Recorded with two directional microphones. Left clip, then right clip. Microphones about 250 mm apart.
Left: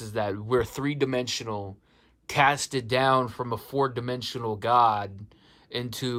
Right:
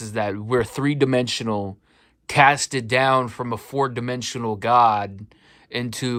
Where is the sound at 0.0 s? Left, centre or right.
Centre.